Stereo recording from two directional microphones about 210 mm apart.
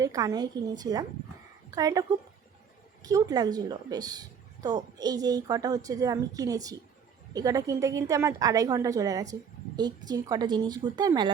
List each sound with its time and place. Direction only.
0.0 s a woman's voice: 15° right (ahead or behind)